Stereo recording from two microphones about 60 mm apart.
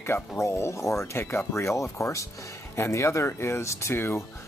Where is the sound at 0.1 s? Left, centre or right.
Left.